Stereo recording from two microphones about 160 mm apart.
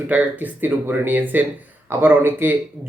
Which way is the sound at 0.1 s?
10° right (ahead or behind).